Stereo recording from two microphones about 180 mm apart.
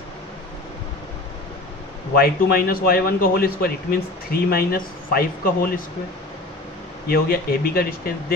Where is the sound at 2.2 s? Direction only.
60° left (ahead or behind).